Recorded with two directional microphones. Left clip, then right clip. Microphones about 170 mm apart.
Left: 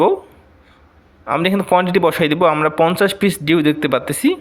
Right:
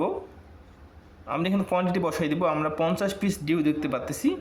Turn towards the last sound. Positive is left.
turn(degrees=40)  # may be behind; listen again after turning